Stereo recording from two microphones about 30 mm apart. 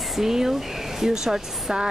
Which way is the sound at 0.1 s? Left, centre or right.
Centre.